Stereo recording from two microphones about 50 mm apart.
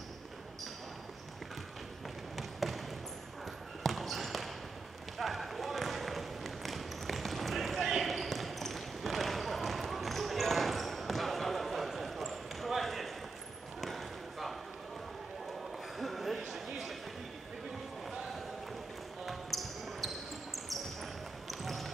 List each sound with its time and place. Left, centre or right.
2.3 s basketball bounce: centre
3.8 s basketball bounce: centre
16.0 s a sound: centre
19.2 s basketball bounce: centre